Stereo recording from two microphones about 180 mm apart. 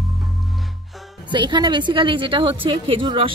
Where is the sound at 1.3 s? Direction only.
25° right (ahead or behind).